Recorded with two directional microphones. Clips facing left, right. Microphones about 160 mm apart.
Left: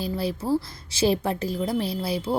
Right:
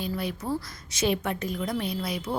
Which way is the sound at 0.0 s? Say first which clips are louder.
Left 4 dB; 30° left (ahead or behind).